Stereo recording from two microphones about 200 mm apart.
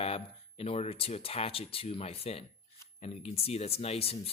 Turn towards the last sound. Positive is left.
turn(degrees=30)  # may be behind; listen again after turning